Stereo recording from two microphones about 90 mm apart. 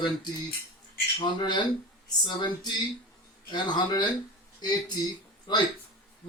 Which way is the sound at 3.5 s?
50° left (ahead or behind).